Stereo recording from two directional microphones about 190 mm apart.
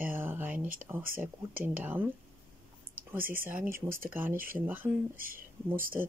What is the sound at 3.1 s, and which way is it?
Speech, 10° right (ahead or behind).